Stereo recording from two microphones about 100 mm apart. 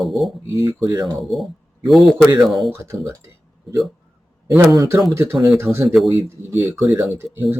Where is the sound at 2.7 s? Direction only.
30° right (ahead or behind).